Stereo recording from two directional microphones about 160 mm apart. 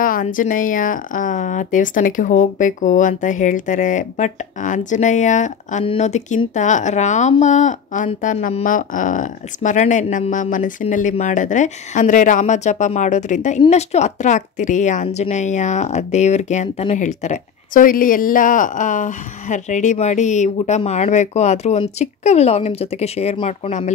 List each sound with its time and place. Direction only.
0.0 s speech: 55° left (ahead or behind); by 23.9 s 40° left (ahead or behind)